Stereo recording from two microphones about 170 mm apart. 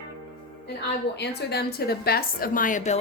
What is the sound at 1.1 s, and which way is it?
A woman's voice, 80° left.